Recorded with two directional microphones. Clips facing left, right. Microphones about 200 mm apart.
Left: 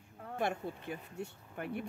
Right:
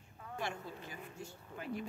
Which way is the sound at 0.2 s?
55° left (ahead or behind).